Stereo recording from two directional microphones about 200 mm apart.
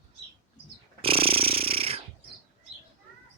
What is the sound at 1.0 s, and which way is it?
Snoring, 30° right (ahead or behind).